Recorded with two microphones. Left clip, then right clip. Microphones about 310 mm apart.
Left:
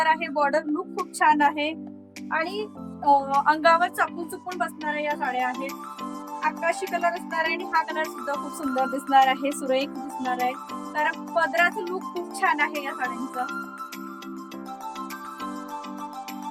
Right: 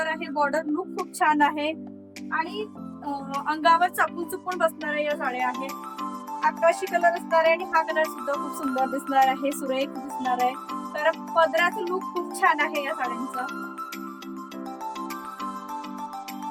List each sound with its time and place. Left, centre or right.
0.0 s speech: centre
3.4 s speech: centre